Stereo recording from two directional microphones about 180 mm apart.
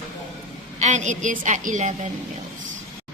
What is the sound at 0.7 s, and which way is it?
A woman's voice, 40° right (ahead or behind).